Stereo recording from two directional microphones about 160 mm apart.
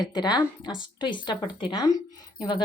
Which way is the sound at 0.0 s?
25° left (ahead or behind).